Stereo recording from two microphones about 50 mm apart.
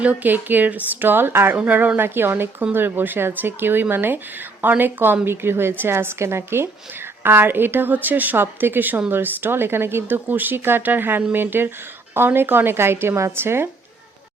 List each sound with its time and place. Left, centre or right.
0.0 s a woman's voice: right
1.6 s speech: right
2.0 s a woman's voice: right
7.2 s a woman's voice: right